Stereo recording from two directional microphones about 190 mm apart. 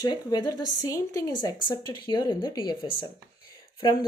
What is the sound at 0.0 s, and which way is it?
A woman's voice, 20° left (ahead or behind).